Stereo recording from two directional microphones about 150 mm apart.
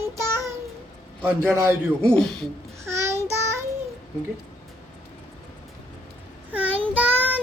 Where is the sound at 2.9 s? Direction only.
20° right (ahead or behind).